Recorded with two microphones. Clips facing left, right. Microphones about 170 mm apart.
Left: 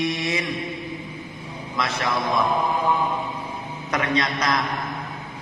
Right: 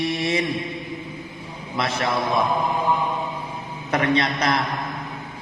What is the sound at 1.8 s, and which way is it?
Speech, 30° right (ahead or behind).